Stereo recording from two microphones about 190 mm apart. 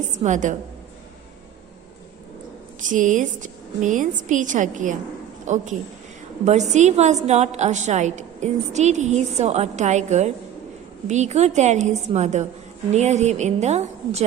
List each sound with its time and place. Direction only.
0.2 s a woman's voice: 40° right (ahead or behind)
2.8 s a woman's voice: 40° right (ahead or behind)